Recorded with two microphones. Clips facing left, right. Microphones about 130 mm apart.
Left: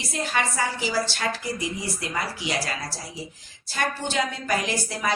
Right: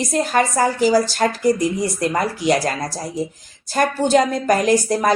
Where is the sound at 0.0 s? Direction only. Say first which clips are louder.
Right 9 dB; 45° right (ahead or behind).